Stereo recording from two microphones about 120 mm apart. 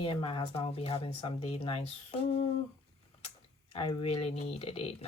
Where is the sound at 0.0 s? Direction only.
45° left (ahead or behind).